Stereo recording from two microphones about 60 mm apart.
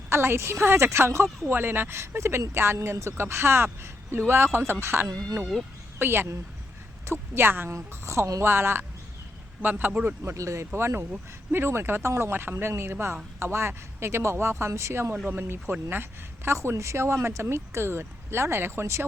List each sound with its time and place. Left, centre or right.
0.1 s a woman's voice: right
7.7 s speech: right
10.2 s speech: right
10.8 s speech: right
15.3 s speech: right